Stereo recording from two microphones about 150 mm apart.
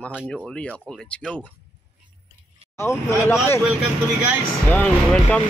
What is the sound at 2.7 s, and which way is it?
Speech, 15° left (ahead or behind).